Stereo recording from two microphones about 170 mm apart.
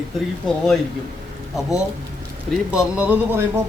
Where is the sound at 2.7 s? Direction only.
5° right (ahead or behind).